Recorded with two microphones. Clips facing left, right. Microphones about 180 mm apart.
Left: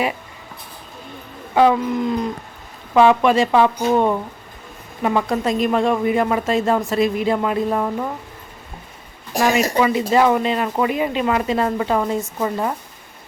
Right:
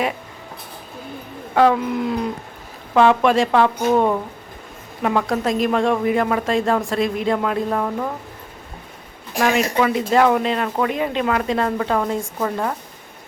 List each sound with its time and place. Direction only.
1.5 s speech: centre (ahead or behind)
9.3 s speech: 40° left (ahead or behind)
9.7 s speech: centre (ahead or behind)